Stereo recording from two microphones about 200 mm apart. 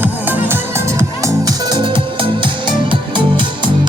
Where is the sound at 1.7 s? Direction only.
25° right (ahead or behind).